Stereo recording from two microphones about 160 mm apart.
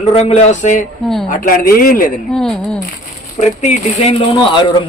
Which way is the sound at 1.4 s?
60° left (ahead or behind).